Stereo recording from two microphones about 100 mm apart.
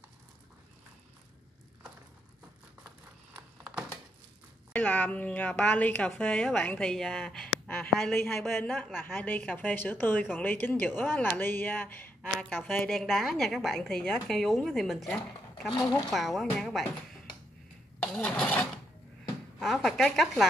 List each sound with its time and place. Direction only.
4.7 s a woman's voice: 15° left (ahead or behind)
8.1 s speech: 20° left (ahead or behind)
8.6 s a woman's voice: centre (ahead or behind)
8.9 s a woman's voice: 20° left (ahead or behind)
12.2 s speech: 5° left (ahead or behind)
12.5 s speech: 20° left (ahead or behind)
12.9 s a woman's voice: centre (ahead or behind)
18.0 s a woman's voice: 10° left (ahead or behind)